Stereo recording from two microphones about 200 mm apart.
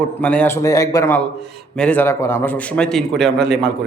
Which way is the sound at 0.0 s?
5° left (ahead or behind).